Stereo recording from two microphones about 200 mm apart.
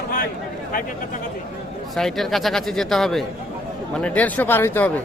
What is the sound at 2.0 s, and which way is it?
Speech, centre (ahead or behind).